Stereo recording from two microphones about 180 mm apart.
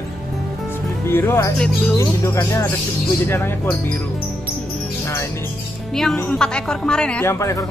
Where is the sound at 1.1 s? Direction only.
15° left (ahead or behind).